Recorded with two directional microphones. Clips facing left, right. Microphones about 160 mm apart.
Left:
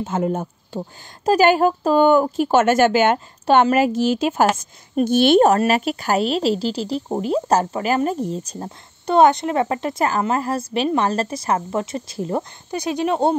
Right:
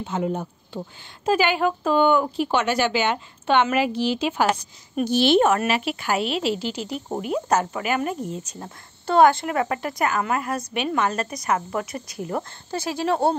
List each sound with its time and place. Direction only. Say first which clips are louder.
0.0 s a woman's voice: left 4 dB; 50° left (ahead or behind)
9.0 s a woman's voice: left 2 dB; 20° left (ahead or behind)